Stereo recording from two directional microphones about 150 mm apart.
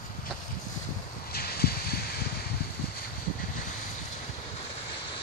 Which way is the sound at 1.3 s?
90° left.